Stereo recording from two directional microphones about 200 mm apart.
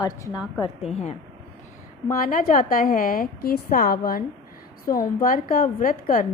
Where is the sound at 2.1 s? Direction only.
40° left (ahead or behind).